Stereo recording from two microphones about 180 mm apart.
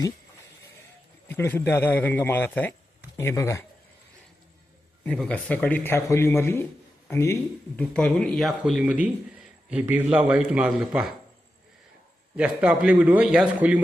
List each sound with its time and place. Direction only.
1.3 s speech: 10° left (ahead or behind)
5.0 s a man's voice: 5° left (ahead or behind)
12.4 s a man's voice: 5° right (ahead or behind)